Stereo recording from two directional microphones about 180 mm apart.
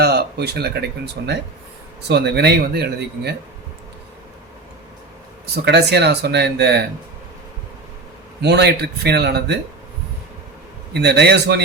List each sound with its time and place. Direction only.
0.0 s a man's voice: 65° right (ahead or behind)
5.6 s speech: 70° right (ahead or behind)
8.4 s speech: 70° right (ahead or behind)
10.9 s speech: 65° right (ahead or behind)